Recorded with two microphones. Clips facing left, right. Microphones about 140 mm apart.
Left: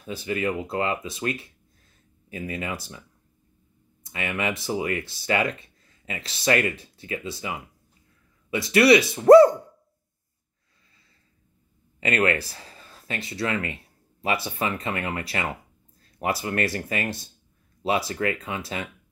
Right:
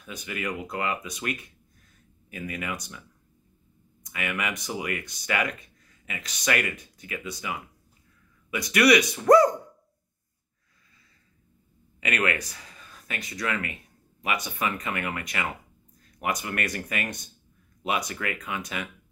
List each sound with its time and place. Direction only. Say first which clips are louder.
0.0 s speech: left 7 dB; 30° left (ahead or behind)
12.0 s speech: left 4 dB; 30° left (ahead or behind)